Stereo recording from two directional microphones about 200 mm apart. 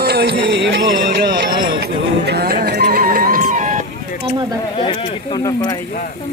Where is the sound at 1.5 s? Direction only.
25° right (ahead or behind).